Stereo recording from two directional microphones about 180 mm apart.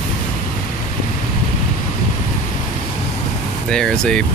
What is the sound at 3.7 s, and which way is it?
Speech, 5° left (ahead or behind).